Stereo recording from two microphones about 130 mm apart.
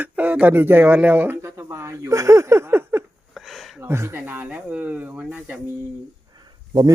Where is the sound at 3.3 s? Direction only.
Centre (ahead or behind).